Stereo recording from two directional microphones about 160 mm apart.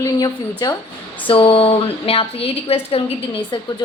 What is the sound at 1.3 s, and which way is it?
A woman's voice, 35° left (ahead or behind).